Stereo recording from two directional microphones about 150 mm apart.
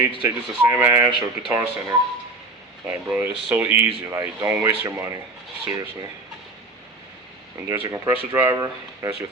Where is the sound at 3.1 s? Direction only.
10° right (ahead or behind).